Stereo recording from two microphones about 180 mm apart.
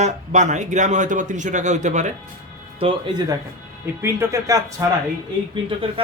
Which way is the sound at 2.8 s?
30° right (ahead or behind).